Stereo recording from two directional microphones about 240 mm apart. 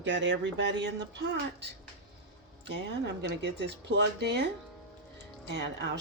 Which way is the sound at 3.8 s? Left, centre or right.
Right.